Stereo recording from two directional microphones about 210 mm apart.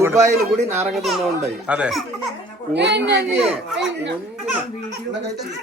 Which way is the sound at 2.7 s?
55° right (ahead or behind).